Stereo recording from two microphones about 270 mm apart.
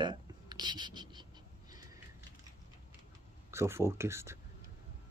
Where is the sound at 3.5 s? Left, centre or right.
Centre.